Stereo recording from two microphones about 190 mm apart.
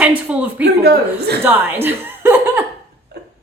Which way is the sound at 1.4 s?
10° right (ahead or behind).